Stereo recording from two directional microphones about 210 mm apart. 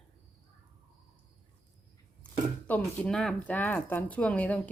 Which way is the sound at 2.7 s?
5° left (ahead or behind).